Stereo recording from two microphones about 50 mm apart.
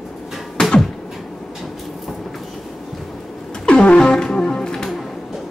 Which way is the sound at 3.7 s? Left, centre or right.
Centre.